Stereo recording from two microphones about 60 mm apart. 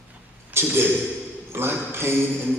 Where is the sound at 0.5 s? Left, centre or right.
Right.